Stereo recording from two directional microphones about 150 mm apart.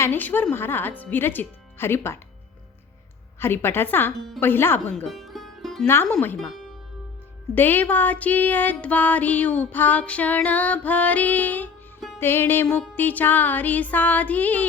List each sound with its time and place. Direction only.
0.0 s music: 15° left (ahead or behind)
3.4 s music: 15° left (ahead or behind)
5.0 s music: centre (ahead or behind)
5.8 s music: 15° left (ahead or behind)
7.5 s music: 15° left (ahead or behind)
11.9 s music: centre (ahead or behind)
12.2 s music: 15° left (ahead or behind)